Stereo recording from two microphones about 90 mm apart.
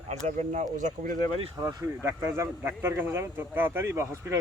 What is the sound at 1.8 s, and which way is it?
Speech, 30° right (ahead or behind).